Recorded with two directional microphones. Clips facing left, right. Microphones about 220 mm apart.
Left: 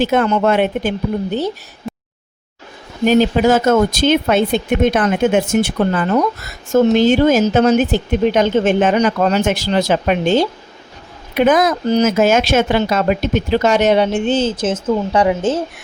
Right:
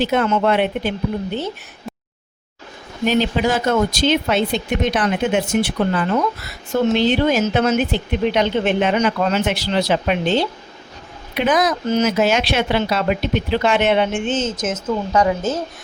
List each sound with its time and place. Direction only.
0.0 s a woman's voice: 45° left (ahead or behind)
1.9 s a sound: centre (ahead or behind)
3.1 s a woman's voice: 45° left (ahead or behind)
11.9 s speech: 35° left (ahead or behind)
12.1 s a woman's voice: 50° left (ahead or behind); by 15.6 s 30° left (ahead or behind)